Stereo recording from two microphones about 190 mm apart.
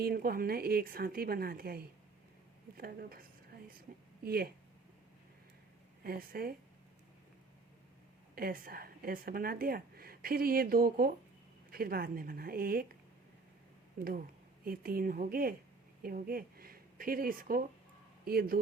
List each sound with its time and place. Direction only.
0.0 s speech: 50° right (ahead or behind)
6.0 s speech: 50° right (ahead or behind)
8.4 s speech: 50° right (ahead or behind)
14.0 s speech: 50° right (ahead or behind)